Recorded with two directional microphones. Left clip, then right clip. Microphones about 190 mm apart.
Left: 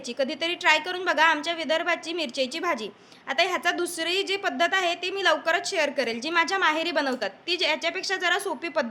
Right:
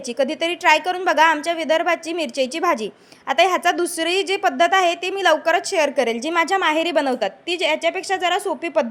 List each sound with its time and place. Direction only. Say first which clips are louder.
0.2 s a woman's voice: right 6 dB; 30° right (ahead or behind)